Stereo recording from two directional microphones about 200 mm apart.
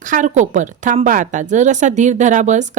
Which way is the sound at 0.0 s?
40° right (ahead or behind).